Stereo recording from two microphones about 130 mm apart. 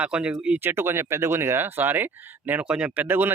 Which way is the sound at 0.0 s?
10° right (ahead or behind).